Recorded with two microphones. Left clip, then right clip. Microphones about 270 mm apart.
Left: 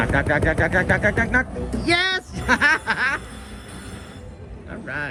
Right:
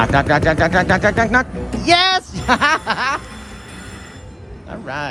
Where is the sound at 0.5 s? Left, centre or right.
Left.